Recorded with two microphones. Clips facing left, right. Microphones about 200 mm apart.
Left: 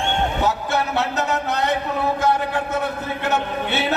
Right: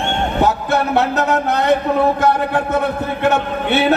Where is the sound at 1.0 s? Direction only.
55° right (ahead or behind).